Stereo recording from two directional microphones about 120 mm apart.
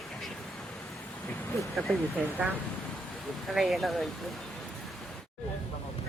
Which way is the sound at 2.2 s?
5° left (ahead or behind).